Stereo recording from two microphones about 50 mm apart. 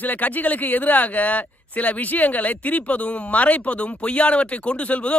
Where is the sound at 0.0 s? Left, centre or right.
Left.